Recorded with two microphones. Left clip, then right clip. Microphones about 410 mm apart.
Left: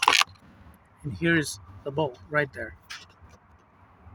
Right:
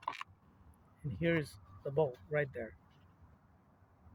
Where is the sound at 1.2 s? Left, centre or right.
Right.